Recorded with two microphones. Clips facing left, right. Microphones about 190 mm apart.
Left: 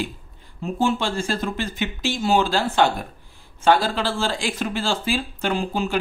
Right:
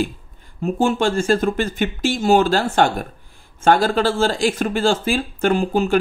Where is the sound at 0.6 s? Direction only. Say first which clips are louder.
Right 4 dB; 45° right (ahead or behind).